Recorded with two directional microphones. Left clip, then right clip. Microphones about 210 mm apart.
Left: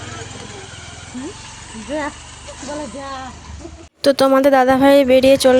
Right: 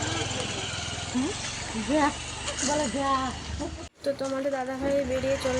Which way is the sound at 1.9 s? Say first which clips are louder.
Left 1 dB; 5° left (ahead or behind).